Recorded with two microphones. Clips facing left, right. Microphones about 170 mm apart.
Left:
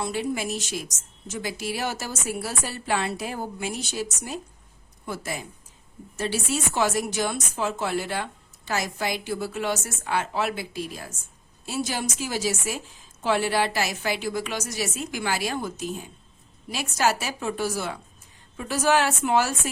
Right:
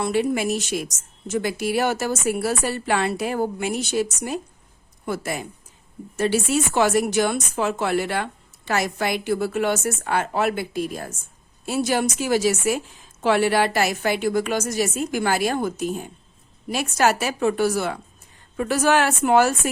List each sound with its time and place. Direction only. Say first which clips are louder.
0.0 s a woman's voice: right 6 dB; 65° right (ahead or behind)